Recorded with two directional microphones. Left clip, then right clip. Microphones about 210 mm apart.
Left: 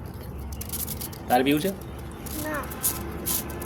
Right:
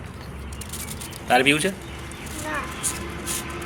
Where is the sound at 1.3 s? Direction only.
Centre (ahead or behind).